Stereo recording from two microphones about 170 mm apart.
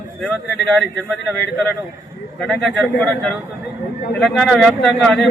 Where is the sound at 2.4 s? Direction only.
Centre (ahead or behind).